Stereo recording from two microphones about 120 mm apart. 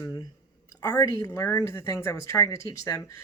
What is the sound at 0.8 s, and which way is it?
Speech, 30° left (ahead or behind).